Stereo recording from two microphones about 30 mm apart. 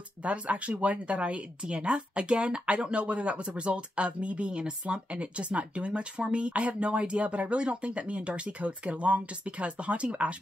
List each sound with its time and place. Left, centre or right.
0.2 s speech: right